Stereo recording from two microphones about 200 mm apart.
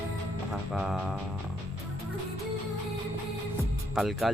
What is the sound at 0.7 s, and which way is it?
Speech, centre (ahead or behind).